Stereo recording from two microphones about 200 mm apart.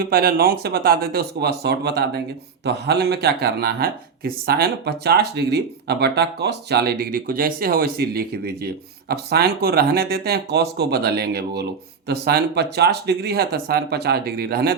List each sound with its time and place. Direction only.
0.0 s speech: 50° right (ahead or behind)